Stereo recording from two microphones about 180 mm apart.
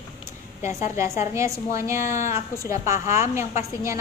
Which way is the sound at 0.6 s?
40° left (ahead or behind).